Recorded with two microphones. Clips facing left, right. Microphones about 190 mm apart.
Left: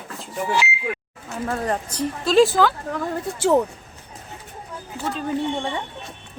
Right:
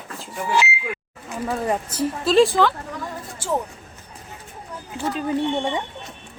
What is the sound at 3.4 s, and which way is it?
Speech, 65° left (ahead or behind).